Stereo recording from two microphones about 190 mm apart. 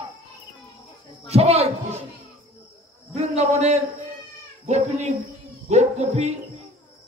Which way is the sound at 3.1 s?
35° right (ahead or behind).